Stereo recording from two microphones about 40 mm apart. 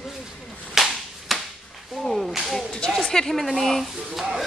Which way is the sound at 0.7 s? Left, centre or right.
Centre.